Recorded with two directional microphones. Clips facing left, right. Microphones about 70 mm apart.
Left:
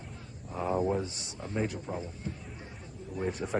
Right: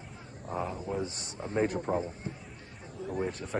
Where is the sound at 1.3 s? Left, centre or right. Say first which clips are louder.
Right 3 dB; right.